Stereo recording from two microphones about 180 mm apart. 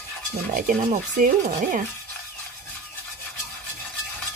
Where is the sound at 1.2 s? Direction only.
50° right (ahead or behind).